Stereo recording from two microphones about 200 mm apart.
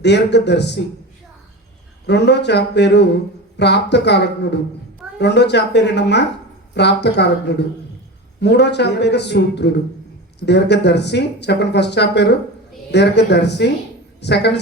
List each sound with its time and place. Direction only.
0.0 s speech: 60° left (ahead or behind)
2.0 s a woman's voice: 60° left (ahead or behind)